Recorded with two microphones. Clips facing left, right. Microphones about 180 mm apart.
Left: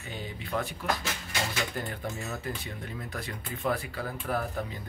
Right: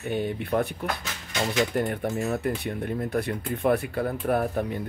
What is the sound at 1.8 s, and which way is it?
Speech, 65° right (ahead or behind).